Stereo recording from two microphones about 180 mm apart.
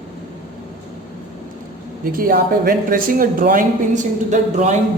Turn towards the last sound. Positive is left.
turn(degrees=-40)  # may be behind; listen again after turning